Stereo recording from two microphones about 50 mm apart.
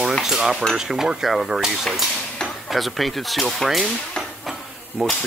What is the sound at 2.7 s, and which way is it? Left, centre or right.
Speech, centre.